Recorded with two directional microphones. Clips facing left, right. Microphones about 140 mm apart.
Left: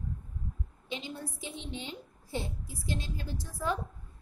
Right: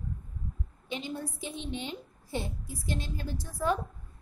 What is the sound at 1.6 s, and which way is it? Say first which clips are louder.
A woman's voice: right 4 dB; 60° right (ahead or behind).